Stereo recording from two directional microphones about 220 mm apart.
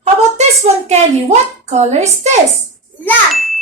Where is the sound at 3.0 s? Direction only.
5° left (ahead or behind).